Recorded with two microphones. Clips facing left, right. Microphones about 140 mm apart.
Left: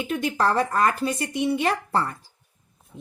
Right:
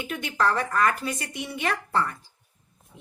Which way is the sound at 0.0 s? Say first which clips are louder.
Left 3 dB; 30° left (ahead or behind).